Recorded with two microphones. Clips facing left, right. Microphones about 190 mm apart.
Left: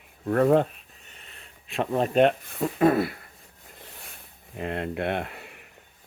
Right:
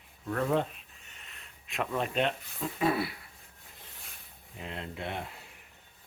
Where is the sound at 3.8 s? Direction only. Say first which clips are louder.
Left 7 dB; 65° left (ahead or behind).